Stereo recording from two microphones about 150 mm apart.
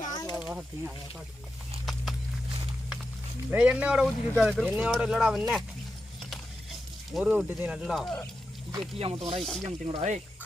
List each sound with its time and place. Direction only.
0.0 s a sound: 25° left (ahead or behind)
0.3 s a sound: 10° right (ahead or behind)
3.5 s speech: 10° right (ahead or behind)
7.1 s speech: 5° right (ahead or behind)
9.0 s speech: 40° right (ahead or behind)
9.4 s speech: centre (ahead or behind)
9.6 s speech: 50° right (ahead or behind)